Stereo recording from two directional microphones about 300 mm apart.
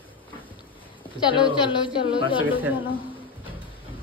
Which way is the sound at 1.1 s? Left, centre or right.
Centre.